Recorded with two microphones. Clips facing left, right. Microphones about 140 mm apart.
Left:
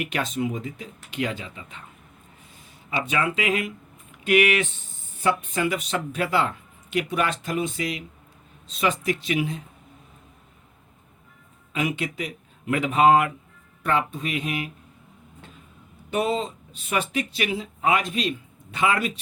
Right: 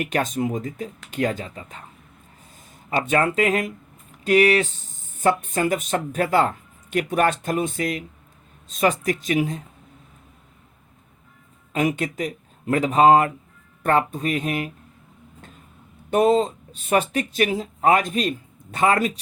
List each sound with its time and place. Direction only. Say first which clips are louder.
0.0 s speech: right 3 dB; 45° right (ahead or behind)
11.7 s speech: right 4 dB; 40° right (ahead or behind)
16.0 s speech: right 7 dB; 45° right (ahead or behind)